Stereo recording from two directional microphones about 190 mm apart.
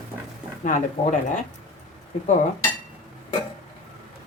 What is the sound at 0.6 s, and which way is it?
Speech, 40° left (ahead or behind).